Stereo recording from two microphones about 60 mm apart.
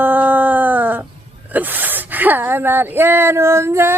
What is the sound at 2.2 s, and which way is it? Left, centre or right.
Speech, right.